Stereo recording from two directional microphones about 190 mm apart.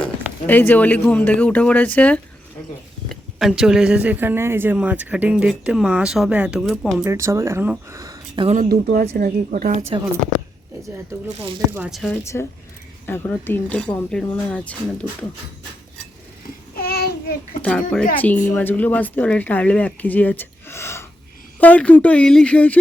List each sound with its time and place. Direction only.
0.4 s speech: 10° left (ahead or behind)
7.0 s speech: 15° right (ahead or behind)
8.7 s a woman's voice: 50° right (ahead or behind)
10.8 s speech: 15° right (ahead or behind)
11.7 s speech: 5° right (ahead or behind)
12.2 s speech: 15° left (ahead or behind)
16.7 s child singing: 55° left (ahead or behind)
17.6 s speech: 5° left (ahead or behind)